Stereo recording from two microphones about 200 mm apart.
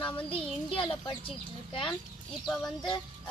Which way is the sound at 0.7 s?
25° left (ahead or behind).